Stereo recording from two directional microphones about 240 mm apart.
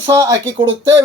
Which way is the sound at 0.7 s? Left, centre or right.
Right.